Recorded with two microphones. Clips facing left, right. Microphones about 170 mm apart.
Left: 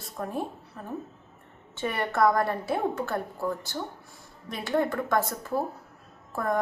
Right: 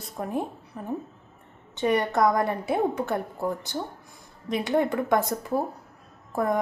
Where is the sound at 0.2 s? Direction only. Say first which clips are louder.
Right 3 dB; 15° right (ahead or behind).